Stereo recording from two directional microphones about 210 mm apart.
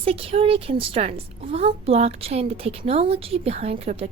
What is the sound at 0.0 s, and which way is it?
A woman's voice, 25° right (ahead or behind).